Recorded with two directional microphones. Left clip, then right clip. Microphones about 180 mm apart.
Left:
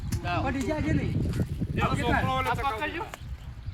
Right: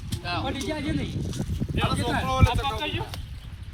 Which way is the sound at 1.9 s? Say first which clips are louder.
Even; 5° left (ahead or behind).